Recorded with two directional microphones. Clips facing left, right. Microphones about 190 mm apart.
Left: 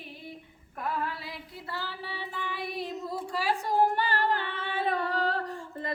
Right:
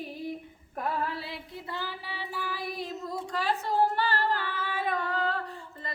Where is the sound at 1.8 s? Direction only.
15° right (ahead or behind); by 5.4 s 40° left (ahead or behind).